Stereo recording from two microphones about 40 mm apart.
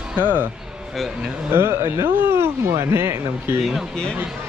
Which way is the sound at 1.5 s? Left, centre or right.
Right.